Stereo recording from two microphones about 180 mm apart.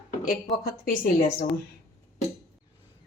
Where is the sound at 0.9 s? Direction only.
50° left (ahead or behind).